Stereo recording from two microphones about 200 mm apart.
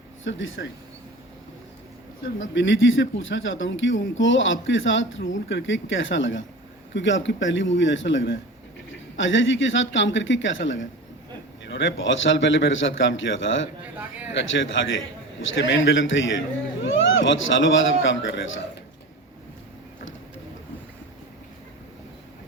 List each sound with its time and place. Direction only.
0.3 s speech: 75° left (ahead or behind)
2.2 s speech: 70° left (ahead or behind)
13.9 s speech: 10° right (ahead or behind)
14.3 s a man's voice: 70° left (ahead or behind)